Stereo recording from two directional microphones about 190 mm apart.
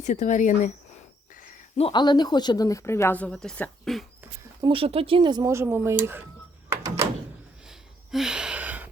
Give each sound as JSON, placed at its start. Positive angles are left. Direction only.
{"t": 0.0, "sound": "speech", "side_deg": 40}
{"t": 1.7, "sound": "speech", "side_deg": 25}
{"t": 4.7, "sound": "speech", "side_deg": -30}
{"t": 6.7, "sound": "door", "side_deg": -15}
{"t": 7.7, "sound": "a sound", "side_deg": -5}